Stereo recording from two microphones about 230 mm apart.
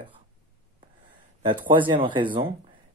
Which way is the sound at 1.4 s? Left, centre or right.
Right.